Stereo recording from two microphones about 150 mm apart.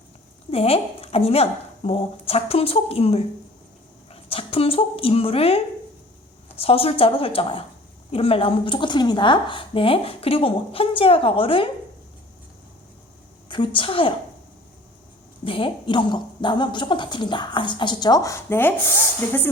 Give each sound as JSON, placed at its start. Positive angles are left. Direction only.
{"t": 0.5, "sound": "a woman's voice", "side_deg": 40}
{"t": 13.5, "sound": "a woman's voice", "side_deg": 35}
{"t": 15.4, "sound": "a woman's voice", "side_deg": 35}